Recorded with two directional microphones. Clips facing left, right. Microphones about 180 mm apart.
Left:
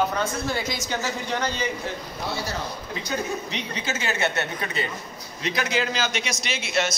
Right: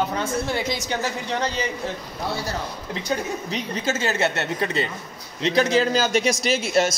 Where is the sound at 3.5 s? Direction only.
40° right (ahead or behind).